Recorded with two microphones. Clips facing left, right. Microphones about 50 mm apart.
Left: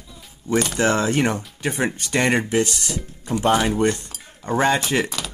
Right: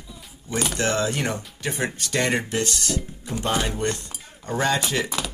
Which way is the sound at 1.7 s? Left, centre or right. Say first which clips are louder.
Left 4 dB; centre.